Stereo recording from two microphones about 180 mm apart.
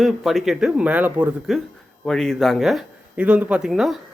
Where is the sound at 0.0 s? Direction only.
Centre (ahead or behind).